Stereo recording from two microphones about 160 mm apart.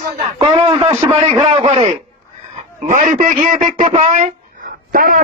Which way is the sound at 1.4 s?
40° right (ahead or behind).